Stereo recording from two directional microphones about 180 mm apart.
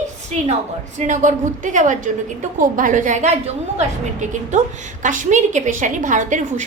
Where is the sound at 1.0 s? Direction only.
45° right (ahead or behind).